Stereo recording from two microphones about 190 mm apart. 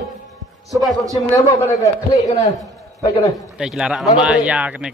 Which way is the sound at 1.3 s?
15° left (ahead or behind).